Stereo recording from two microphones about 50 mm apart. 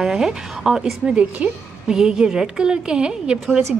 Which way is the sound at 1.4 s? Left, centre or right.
Right.